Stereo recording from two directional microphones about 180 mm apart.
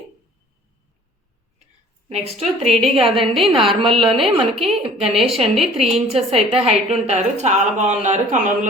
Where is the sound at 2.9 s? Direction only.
30° right (ahead or behind).